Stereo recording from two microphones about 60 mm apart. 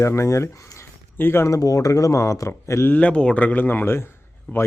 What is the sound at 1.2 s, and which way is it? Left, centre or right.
Speech, left.